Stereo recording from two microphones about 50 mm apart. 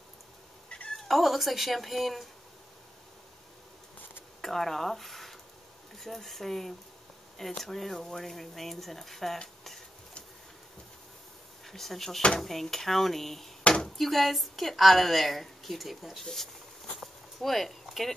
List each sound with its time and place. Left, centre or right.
0.7 s cat: left
0.9 s a woman's voice: centre
4.4 s a woman's voice: centre
11.6 s a woman's voice: centre
13.7 s a sound: centre
13.9 s a woman's voice: centre
17.0 s a sound: centre